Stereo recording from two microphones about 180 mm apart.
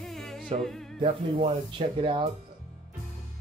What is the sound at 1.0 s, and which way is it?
Speech, 30° right (ahead or behind).